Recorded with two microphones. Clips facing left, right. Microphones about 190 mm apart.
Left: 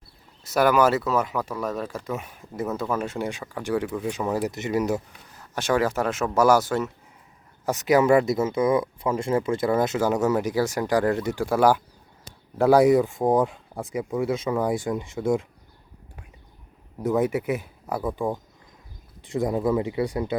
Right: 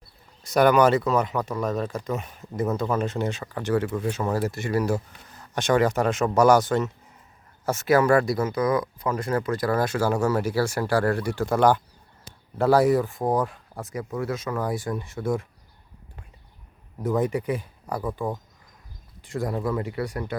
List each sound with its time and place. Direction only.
0.4 s speech: 5° left (ahead or behind)
4.9 s speech: 5° left (ahead or behind); by 11.4 s 20° left (ahead or behind)
11.4 s speech: 5° left (ahead or behind)
17.0 s speech: 10° left (ahead or behind)
19.2 s speech: 20° left (ahead or behind)